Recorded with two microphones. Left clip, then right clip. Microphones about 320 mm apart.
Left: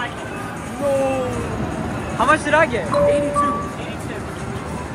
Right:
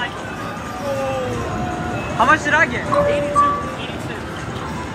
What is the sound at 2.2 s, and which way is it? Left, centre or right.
Speech, centre.